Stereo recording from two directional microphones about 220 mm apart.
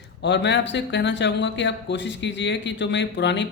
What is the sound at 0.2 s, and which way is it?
Speech, 55° left (ahead or behind).